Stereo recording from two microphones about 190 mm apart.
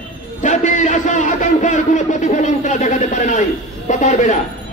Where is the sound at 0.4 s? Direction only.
40° left (ahead or behind).